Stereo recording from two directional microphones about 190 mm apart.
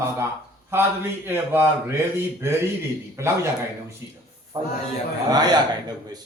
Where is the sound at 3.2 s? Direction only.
15° right (ahead or behind).